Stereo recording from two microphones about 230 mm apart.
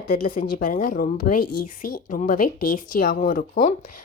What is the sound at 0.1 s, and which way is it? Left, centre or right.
Speech, left.